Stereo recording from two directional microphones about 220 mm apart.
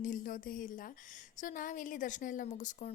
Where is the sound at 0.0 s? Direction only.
40° left (ahead or behind).